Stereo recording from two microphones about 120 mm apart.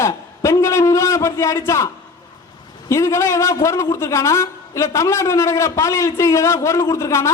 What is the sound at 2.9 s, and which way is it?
A man's voice, 25° left (ahead or behind).